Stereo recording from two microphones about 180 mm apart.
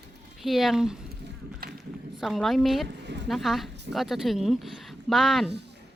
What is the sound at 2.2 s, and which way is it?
A woman's voice, centre (ahead or behind).